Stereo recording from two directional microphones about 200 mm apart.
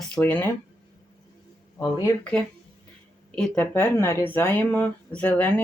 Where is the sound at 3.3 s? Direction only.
5° left (ahead or behind).